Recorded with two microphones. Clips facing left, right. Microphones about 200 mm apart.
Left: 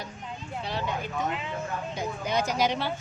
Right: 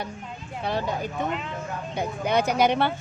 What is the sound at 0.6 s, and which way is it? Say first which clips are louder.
Speech: right 6 dB; 50° right (ahead or behind).